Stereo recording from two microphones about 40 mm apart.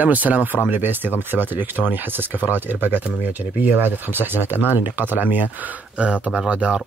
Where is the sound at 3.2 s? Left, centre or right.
Right.